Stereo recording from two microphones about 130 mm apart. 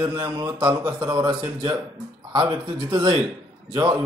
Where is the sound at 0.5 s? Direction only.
30° right (ahead or behind).